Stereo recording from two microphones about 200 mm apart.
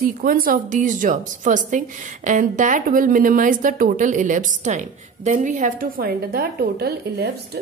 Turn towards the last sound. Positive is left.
turn(degrees=-55)  # may be behind; listen again after turning